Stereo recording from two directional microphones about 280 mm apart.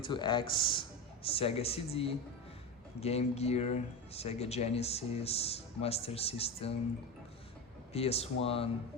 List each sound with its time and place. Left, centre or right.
0.0 s speech: centre
7.9 s speech: left